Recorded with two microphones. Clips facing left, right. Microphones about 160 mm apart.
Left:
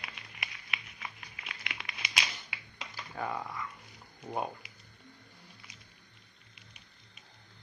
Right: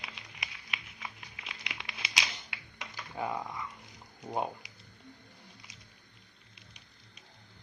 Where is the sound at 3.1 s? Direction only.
15° right (ahead or behind).